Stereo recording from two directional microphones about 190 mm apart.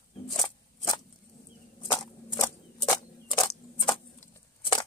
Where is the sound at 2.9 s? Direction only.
20° left (ahead or behind).